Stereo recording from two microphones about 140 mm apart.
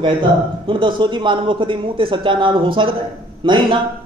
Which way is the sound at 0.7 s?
35° right (ahead or behind).